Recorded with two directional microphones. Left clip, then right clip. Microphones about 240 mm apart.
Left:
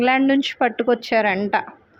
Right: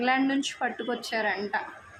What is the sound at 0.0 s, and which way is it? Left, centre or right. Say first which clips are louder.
A woman's voice: left 8 dB; left.